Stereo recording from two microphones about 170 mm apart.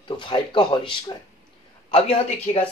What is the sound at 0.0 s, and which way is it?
Speech, 30° left (ahead or behind).